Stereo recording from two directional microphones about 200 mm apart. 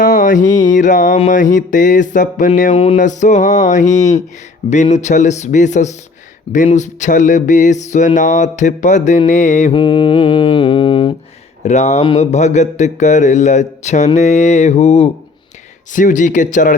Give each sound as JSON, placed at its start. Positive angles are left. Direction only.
{"t": 0.0, "sound": "a sound", "side_deg": 40}
{"t": 0.4, "sound": "mantra", "side_deg": 20}
{"t": 0.7, "sound": "music", "side_deg": 40}
{"t": 9.7, "sound": "mantra", "side_deg": 25}
{"t": 11.6, "sound": "music", "side_deg": 35}